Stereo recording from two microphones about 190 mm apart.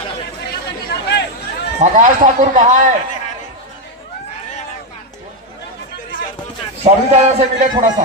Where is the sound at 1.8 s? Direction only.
40° right (ahead or behind).